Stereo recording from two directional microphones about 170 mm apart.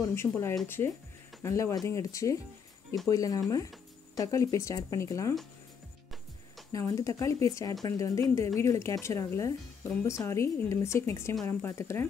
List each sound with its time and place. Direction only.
0.0 s a woman's voice: 15° left (ahead or behind)
6.7 s a woman's voice: 20° left (ahead or behind)